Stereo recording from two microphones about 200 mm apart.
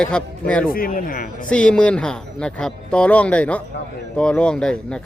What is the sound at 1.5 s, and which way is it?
Speech, 5° left (ahead or behind).